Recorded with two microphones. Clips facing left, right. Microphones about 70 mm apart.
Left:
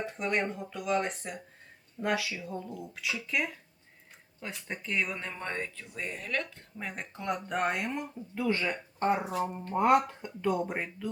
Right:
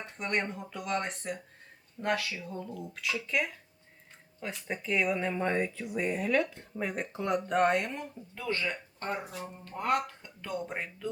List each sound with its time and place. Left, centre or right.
0.0 s speech: centre